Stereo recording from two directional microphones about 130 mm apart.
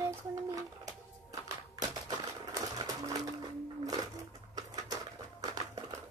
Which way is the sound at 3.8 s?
30° right (ahead or behind).